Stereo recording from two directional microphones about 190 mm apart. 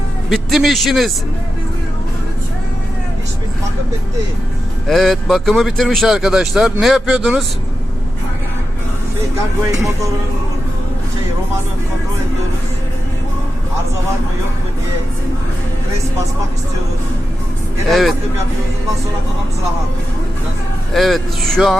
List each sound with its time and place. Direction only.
0.3 s speech: centre (ahead or behind)
4.9 s speech: centre (ahead or behind)
9.7 s speech: 15° right (ahead or behind)
17.8 s speech: centre (ahead or behind)
20.9 s speech: centre (ahead or behind)